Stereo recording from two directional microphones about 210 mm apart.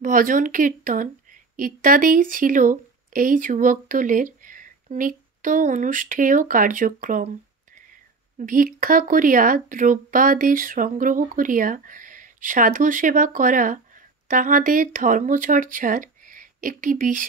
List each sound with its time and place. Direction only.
0.0 s speech: 40° right (ahead or behind)
8.4 s speech: 40° right (ahead or behind)